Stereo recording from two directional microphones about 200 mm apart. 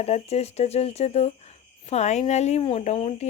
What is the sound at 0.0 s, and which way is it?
Speech, 30° left (ahead or behind).